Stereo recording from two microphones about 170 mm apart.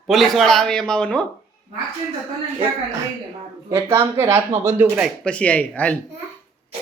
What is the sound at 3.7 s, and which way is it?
Speech, 15° right (ahead or behind).